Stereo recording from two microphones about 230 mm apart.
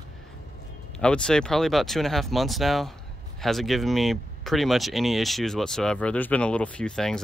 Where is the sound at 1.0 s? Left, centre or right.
Centre.